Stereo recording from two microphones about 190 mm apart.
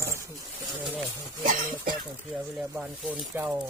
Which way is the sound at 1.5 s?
50° right (ahead or behind).